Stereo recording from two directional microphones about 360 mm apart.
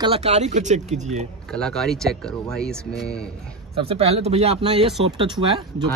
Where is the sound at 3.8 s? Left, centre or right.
Centre.